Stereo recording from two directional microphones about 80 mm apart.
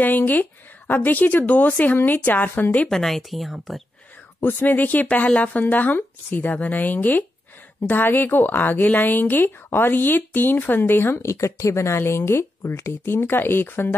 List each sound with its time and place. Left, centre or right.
0.0 s a woman's voice: left
2.9 s speech: centre
4.4 s a woman's voice: left